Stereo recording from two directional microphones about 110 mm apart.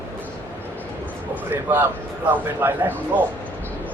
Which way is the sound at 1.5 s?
15° right (ahead or behind).